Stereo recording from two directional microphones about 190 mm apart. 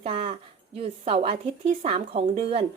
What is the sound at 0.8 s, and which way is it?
A woman's voice, 30° right (ahead or behind).